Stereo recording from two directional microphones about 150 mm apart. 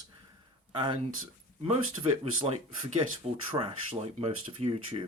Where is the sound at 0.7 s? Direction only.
30° right (ahead or behind).